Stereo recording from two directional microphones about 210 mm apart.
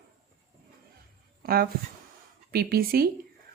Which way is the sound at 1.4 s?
45° right (ahead or behind).